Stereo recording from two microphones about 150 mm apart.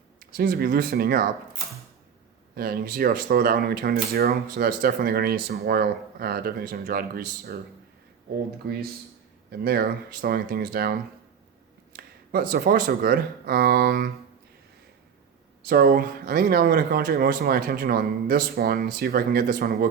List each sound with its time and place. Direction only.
0.2 s speech: 80° right
2.6 s speech: 85° right
8.6 s speech: 90° right
11.9 s speech: 75° right (ahead or behind)
15.6 s speech: 90° right